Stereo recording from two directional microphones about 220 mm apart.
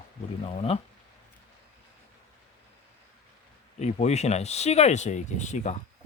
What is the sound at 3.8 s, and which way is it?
Speech, 30° left (ahead or behind).